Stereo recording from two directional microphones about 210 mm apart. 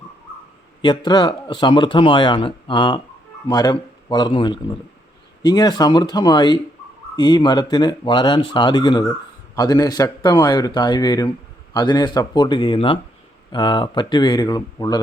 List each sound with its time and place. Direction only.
0.8 s speech: 20° left (ahead or behind)